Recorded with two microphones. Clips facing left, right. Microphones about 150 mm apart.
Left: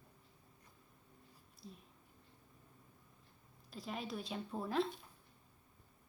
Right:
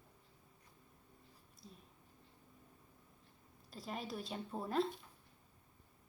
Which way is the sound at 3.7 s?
Centre (ahead or behind).